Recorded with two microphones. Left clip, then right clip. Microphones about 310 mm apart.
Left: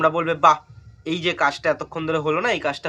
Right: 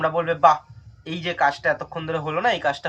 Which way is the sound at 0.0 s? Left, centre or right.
Centre.